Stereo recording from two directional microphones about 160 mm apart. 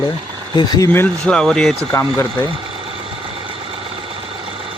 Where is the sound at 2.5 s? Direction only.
35° right (ahead or behind).